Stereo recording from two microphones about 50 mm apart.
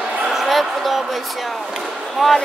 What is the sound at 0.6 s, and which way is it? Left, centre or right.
Speech, centre.